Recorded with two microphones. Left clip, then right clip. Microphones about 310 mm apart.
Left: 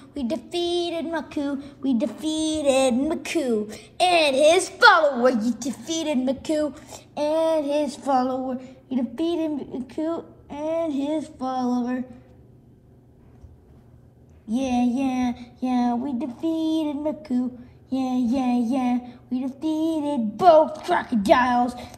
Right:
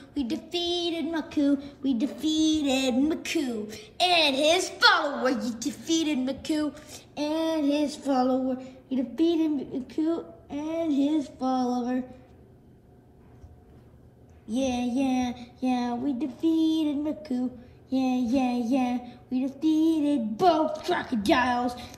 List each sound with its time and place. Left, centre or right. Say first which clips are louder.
0.0 s a sound: left 3 dB; centre
7.9 s child singing: left 3 dB; centre
14.5 s child singing: left 4 dB; centre